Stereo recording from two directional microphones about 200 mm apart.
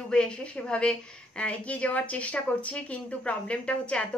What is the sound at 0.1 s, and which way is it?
A woman's voice, 5° left (ahead or behind).